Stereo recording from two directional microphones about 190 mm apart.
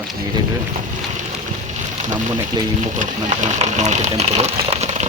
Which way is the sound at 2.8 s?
40° right (ahead or behind).